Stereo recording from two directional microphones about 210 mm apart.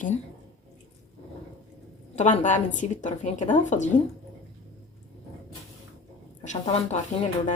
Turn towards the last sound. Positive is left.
turn(degrees=30)  # may be behind; listen again after turning